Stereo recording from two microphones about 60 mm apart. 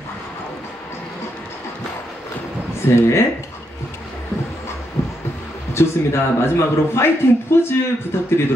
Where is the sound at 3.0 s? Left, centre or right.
Left.